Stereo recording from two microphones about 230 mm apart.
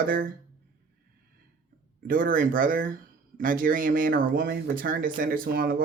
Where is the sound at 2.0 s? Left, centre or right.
Right.